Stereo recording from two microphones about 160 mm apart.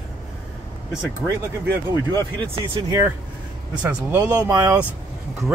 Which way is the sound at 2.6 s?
25° right (ahead or behind).